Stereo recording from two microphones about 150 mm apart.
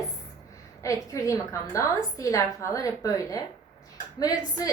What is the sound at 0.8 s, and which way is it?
A woman's voice, 20° left (ahead or behind).